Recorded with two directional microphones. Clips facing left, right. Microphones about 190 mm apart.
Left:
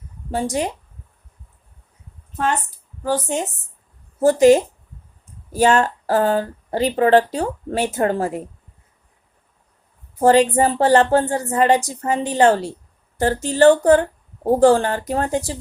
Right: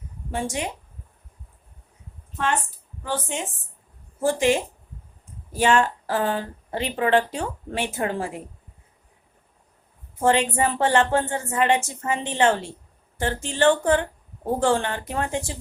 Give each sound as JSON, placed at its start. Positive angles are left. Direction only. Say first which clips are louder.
{"t": 0.3, "sound": "speech", "louder": "left 6 dB", "side_deg": 35}
{"t": 2.3, "sound": "a woman's voice", "louder": "left 3 dB", "side_deg": 40}
{"t": 10.2, "sound": "speech", "louder": "left 7 dB", "side_deg": 40}